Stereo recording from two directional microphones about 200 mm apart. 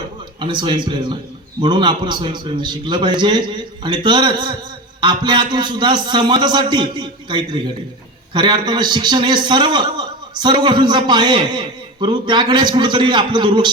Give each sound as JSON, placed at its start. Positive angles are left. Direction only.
{"t": 0.3, "sound": "a man's voice", "side_deg": -25}